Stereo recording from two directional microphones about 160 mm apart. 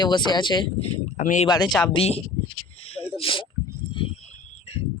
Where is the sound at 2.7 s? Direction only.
40° left (ahead or behind).